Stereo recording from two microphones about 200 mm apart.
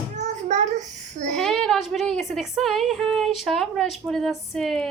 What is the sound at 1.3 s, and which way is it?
A woman's voice, centre (ahead or behind).